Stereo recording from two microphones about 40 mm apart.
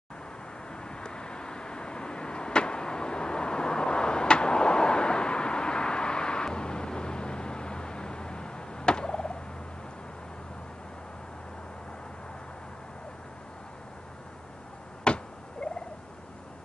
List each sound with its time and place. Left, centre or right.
0.8 s vehicle: left
15.1 s cat: left
15.6 s fowl: left